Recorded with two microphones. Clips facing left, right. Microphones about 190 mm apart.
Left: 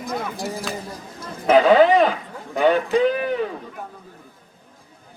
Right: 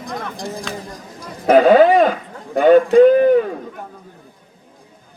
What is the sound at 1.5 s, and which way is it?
Speech, 55° right (ahead or behind).